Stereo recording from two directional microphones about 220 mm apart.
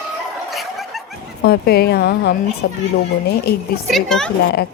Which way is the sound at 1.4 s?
45° left (ahead or behind).